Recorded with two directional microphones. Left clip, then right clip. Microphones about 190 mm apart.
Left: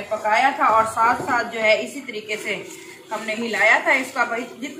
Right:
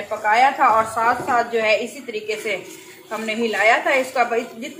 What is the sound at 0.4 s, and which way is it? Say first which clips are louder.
Speech: right 2 dB; 35° right (ahead or behind).